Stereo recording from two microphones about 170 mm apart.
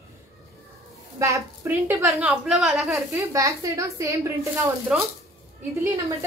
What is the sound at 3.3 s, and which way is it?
A woman's voice, 20° right (ahead or behind).